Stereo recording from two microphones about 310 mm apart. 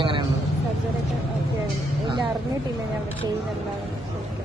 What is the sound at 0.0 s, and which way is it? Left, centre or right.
Vehicle, centre.